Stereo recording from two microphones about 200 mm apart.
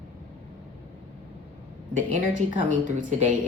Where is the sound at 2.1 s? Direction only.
40° right (ahead or behind).